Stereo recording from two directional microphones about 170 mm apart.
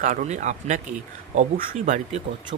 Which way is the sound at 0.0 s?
50° right (ahead or behind).